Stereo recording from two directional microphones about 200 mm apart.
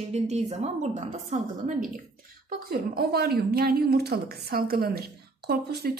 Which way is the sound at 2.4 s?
50° right (ahead or behind).